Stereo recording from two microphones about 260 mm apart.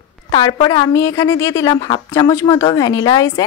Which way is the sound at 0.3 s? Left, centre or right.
Centre.